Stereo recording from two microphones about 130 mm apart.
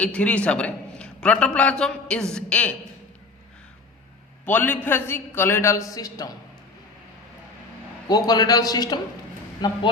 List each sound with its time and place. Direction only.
0.0 s a man's voice: 10° left (ahead or behind)
4.4 s a man's voice: 15° left (ahead or behind)
8.0 s a man's voice: 30° left (ahead or behind)